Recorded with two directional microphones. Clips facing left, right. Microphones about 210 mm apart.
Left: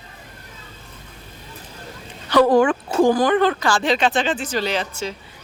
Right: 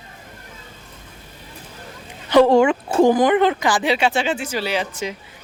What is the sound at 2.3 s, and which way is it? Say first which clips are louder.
Speech: right 2 dB; 25° right (ahead or behind).